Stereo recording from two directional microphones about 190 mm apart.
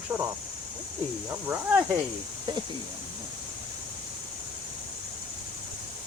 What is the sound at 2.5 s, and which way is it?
Speech, 20° right (ahead or behind).